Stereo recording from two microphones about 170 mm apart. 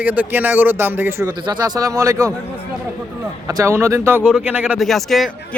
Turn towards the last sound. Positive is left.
turn(degrees=0)  # may be behind; listen again after turning